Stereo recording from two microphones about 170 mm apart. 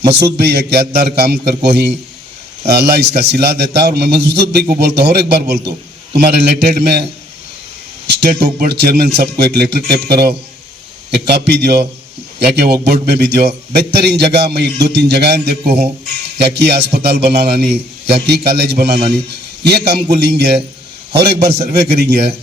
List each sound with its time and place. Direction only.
0.3 s a man's voice: 70° right (ahead or behind)
8.0 s a man's voice: 75° right (ahead or behind)